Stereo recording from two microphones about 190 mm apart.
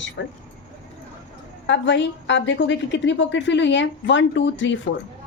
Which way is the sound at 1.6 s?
70° left (ahead or behind).